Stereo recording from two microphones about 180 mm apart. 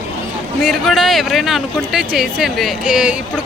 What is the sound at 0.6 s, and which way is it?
Speech, centre (ahead or behind).